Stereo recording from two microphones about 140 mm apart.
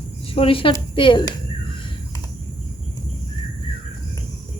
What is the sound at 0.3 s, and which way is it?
Speech, 40° left (ahead or behind).